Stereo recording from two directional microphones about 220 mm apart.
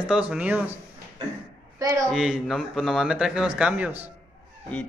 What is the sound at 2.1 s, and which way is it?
Speech, centre (ahead or behind).